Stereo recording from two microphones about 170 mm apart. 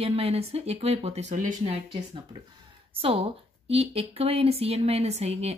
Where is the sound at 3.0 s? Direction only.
35° right (ahead or behind).